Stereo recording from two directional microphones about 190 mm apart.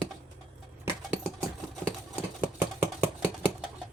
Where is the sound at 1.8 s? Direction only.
10° right (ahead or behind).